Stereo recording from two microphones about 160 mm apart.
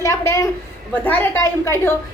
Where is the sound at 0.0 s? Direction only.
20° left (ahead or behind).